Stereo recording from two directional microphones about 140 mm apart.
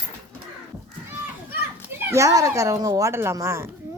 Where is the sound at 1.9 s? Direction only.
20° right (ahead or behind).